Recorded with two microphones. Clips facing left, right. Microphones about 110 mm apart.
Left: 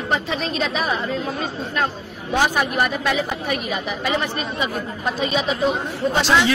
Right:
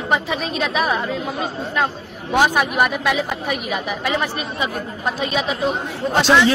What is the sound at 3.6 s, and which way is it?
A woman's voice, 5° right (ahead or behind).